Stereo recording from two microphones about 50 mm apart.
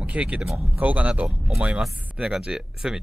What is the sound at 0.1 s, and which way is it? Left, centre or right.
Speech, right.